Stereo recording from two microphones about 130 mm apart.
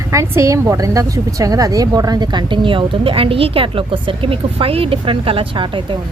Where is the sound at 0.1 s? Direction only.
25° right (ahead or behind); by 5.8 s 40° right (ahead or behind).